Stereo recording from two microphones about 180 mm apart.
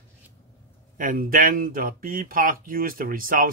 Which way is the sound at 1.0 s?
50° right (ahead or behind).